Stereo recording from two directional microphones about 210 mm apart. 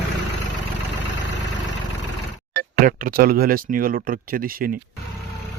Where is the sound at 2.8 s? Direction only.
40° right (ahead or behind).